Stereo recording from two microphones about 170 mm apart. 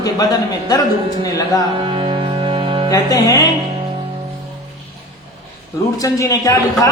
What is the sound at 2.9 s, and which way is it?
Speech, 20° left (ahead or behind).